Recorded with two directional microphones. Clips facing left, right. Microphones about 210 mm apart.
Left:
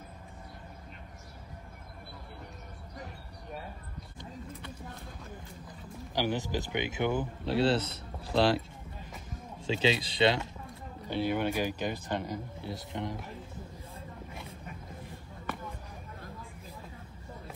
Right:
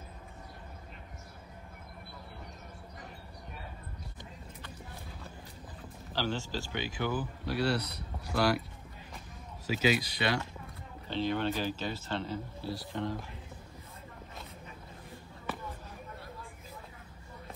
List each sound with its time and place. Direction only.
6.1 s speech: 15° left (ahead or behind)
9.7 s speech: 25° left (ahead or behind)
11.1 s speech: 10° left (ahead or behind)